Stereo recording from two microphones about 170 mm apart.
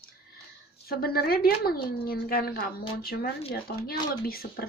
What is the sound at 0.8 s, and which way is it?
Speech, 65° left (ahead or behind).